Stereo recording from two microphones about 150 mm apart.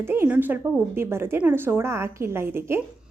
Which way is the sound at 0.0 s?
15° right (ahead or behind).